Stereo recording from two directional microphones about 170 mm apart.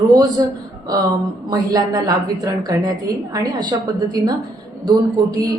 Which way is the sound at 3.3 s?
20° right (ahead or behind).